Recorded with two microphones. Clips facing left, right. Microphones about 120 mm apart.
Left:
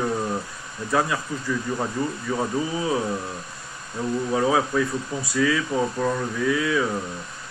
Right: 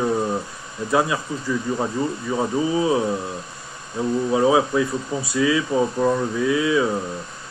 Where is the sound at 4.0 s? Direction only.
25° right (ahead or behind).